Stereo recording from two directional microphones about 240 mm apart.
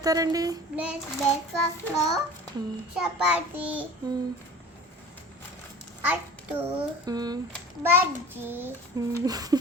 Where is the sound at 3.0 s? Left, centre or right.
Centre.